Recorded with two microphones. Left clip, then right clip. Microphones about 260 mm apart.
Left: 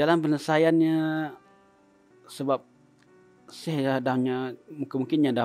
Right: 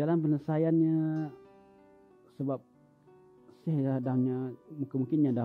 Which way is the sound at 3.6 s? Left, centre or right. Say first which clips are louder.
Left 7 dB; centre.